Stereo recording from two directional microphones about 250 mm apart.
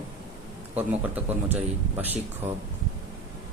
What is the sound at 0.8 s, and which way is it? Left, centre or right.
Speech, centre.